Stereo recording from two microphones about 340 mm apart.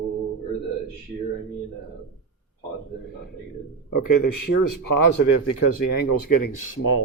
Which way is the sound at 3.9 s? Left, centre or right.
Left.